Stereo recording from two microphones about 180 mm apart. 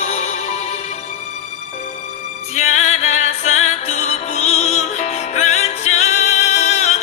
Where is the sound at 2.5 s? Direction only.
40° left (ahead or behind).